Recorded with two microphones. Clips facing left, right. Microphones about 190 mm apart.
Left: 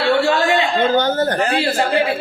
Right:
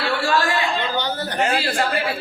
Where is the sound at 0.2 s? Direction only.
25° left (ahead or behind).